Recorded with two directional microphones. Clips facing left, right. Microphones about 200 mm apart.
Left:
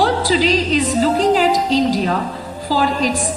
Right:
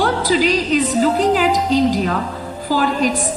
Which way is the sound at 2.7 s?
50° right (ahead or behind).